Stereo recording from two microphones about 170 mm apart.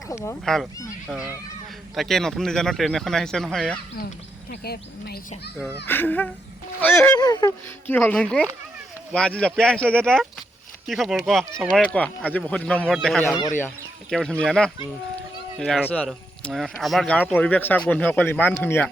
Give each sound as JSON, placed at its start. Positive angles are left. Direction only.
{"t": 0.1, "sound": "speech", "side_deg": 15}
{"t": 0.4, "sound": "speech", "side_deg": 0}
{"t": 4.6, "sound": "speech", "side_deg": 65}
{"t": 5.8, "sound": "speech", "side_deg": 10}
{"t": 7.9, "sound": "speech", "side_deg": 10}